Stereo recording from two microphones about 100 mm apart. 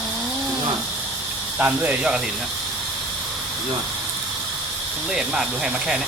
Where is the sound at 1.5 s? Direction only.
15° right (ahead or behind).